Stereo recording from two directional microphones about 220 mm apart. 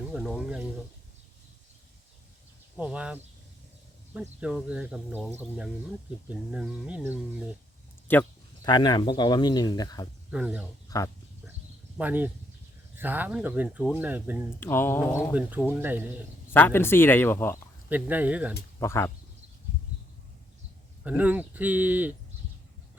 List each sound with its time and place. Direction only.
0.1 s speech: centre (ahead or behind)
2.7 s speech: 5° right (ahead or behind)
8.0 s speech: 10° left (ahead or behind)
10.3 s speech: 5° right (ahead or behind)
10.8 s a sound: 15° left (ahead or behind)
11.9 s speech: 10° right (ahead or behind)
14.6 s speech: 10° left (ahead or behind)
15.3 s speech: 5° right (ahead or behind)
16.5 s speech: 10° left (ahead or behind)
17.8 s speech: 10° right (ahead or behind)
18.8 s speech: 10° left (ahead or behind)
21.0 s speech: 5° right (ahead or behind)